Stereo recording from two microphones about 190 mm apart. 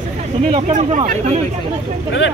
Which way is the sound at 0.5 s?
35° right (ahead or behind).